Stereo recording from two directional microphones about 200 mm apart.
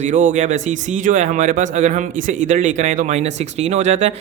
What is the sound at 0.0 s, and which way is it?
Speech, 35° right (ahead or behind).